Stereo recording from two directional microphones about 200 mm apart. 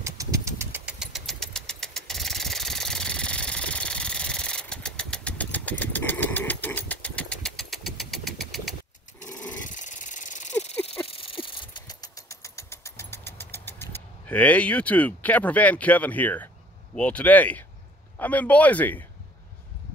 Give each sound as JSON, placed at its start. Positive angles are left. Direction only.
{"t": 0.0, "sound": "engine", "side_deg": -15}
{"t": 9.5, "sound": "dog", "side_deg": 40}
{"t": 11.1, "sound": "vehicle", "side_deg": 25}
{"t": 16.9, "sound": "speech", "side_deg": 5}